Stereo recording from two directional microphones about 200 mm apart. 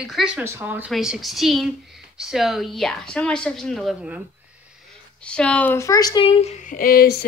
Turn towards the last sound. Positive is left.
turn(degrees=50)  # may be behind; listen again after turning